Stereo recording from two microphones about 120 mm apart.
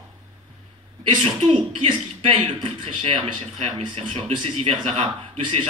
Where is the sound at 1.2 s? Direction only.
50° right (ahead or behind).